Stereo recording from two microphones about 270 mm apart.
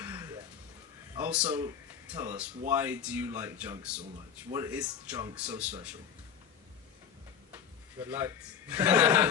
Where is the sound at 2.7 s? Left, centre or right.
Centre.